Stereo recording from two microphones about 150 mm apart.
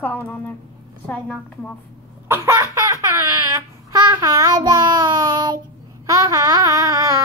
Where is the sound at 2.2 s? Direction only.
20° right (ahead or behind).